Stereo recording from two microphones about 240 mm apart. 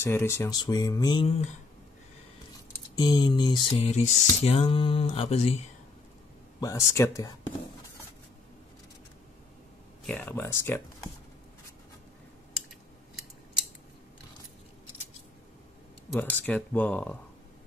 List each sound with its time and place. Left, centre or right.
0.0 s speech: centre
3.0 s a sound: centre
6.6 s speech: centre
10.0 s speech: centre
16.1 s speech: centre